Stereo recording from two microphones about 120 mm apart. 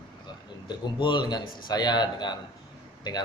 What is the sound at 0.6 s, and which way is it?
Speech, 40° left (ahead or behind).